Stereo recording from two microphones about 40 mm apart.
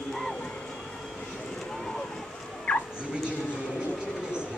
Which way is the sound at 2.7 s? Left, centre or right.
Left.